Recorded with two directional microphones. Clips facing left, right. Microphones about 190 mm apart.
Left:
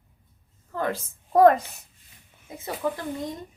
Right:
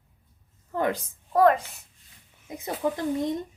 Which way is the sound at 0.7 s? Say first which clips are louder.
Right 2 dB; 15° right (ahead or behind).